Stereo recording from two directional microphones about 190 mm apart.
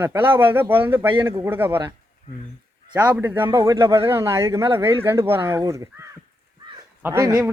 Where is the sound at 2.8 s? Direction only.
20° right (ahead or behind).